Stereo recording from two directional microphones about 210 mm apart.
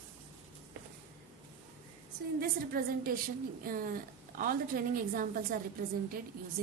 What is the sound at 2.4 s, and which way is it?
A woman's voice, 45° right (ahead or behind).